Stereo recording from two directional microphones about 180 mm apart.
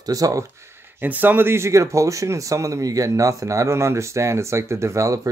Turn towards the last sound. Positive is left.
turn(degrees=-15)  # may be behind; listen again after turning